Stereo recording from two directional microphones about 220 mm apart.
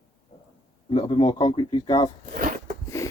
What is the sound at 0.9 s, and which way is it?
Speech, 25° left (ahead or behind).